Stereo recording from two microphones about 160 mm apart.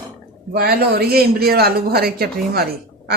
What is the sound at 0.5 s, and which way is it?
A man's voice, 75° right (ahead or behind).